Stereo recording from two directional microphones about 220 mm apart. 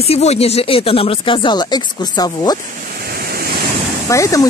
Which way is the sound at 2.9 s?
45° right (ahead or behind).